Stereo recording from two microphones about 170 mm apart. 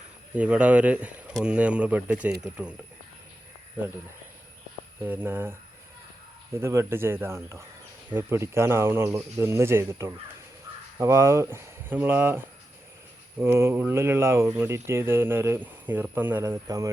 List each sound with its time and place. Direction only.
0.3 s speech: 5° right (ahead or behind)
5.0 s speech: 15° right (ahead or behind)
13.4 s speech: 15° right (ahead or behind)